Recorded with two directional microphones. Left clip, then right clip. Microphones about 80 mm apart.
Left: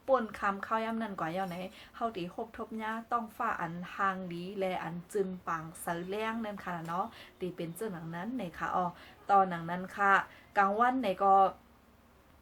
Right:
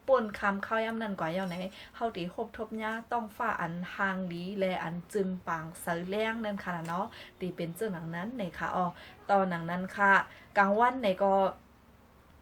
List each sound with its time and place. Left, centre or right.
0.0 s a woman's voice: left